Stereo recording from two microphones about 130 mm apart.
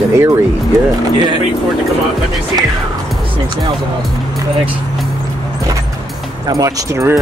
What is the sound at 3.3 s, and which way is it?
Speech, 35° right (ahead or behind).